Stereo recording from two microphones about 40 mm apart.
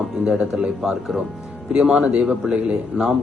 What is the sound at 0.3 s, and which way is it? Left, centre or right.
Speech, right.